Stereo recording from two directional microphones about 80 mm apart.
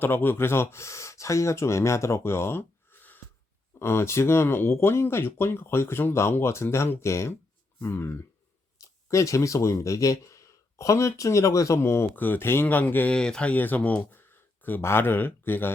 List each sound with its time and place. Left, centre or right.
0.0 s speech: left
13.1 s speech: centre; by 15.7 s left